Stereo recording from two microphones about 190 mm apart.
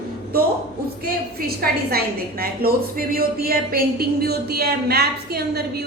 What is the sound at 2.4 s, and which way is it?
A woman's voice, 50° right (ahead or behind).